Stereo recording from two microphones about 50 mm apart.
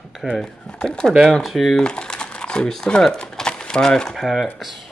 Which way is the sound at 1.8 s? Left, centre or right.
Centre.